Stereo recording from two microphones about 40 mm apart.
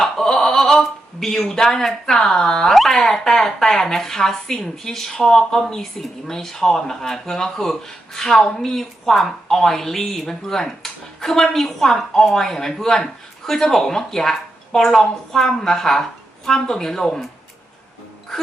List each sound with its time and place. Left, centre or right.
0.0 s a sound: centre
2.1 s speech: centre
2.7 s speech: centre